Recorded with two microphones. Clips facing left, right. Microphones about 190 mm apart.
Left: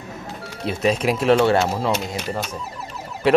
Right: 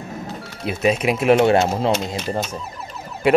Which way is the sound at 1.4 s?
20° right (ahead or behind).